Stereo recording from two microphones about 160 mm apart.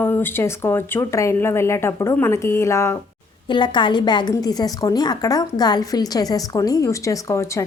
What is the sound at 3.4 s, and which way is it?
Speech, 30° left (ahead or behind).